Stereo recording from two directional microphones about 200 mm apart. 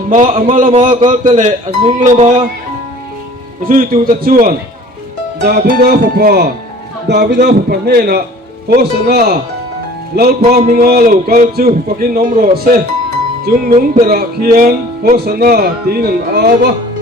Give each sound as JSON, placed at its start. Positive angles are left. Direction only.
{"t": 0.1, "sound": "speech", "side_deg": -40}
{"t": 3.6, "sound": "speech", "side_deg": -45}